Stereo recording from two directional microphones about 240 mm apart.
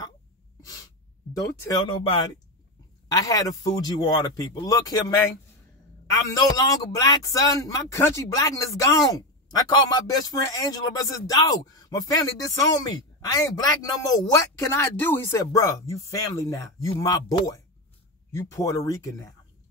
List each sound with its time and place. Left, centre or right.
1.6 s speech: centre
6.4 s speech: centre